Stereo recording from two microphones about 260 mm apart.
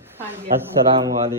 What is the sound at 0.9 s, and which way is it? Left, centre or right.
Speech, right.